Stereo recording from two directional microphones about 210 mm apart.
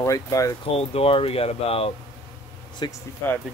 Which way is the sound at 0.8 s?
30° left (ahead or behind).